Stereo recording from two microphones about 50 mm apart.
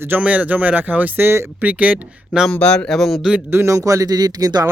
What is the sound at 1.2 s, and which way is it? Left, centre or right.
Speech, right.